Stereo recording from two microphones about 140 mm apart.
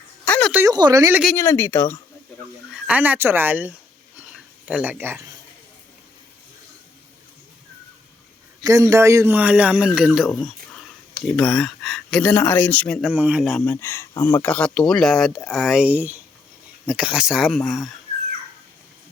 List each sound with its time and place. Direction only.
0.3 s a sound: 10° left (ahead or behind)
0.7 s a woman's voice: 30° right (ahead or behind)
1.4 s speech: 20° left (ahead or behind)
2.8 s speech: 10° right (ahead or behind)
8.6 s speech: 25° right (ahead or behind); by 13.0 s 10° left (ahead or behind)
13.0 s speech: 10° right (ahead or behind)
13.4 s speech: centre (ahead or behind)
13.7 s speech: 20° left (ahead or behind); by 17.6 s centre (ahead or behind)